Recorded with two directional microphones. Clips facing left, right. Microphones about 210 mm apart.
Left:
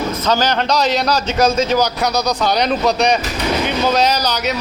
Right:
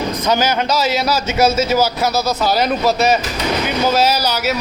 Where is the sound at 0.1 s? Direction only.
15° right (ahead or behind).